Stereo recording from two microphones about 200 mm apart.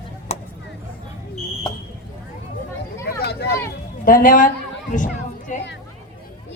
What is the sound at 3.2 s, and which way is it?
Vehicle, 55° left (ahead or behind).